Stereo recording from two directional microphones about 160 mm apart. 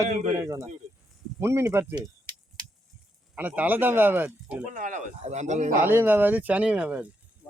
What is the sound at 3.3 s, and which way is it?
Speech, 10° right (ahead or behind).